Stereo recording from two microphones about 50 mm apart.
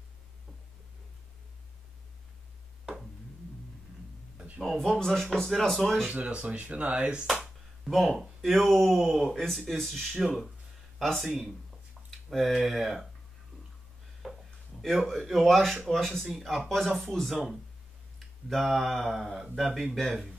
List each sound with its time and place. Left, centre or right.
2.8 s a sound: centre
4.7 s speech: centre
6.0 s speech: right
7.9 s speech: centre
14.2 s a sound: centre
14.8 s speech: centre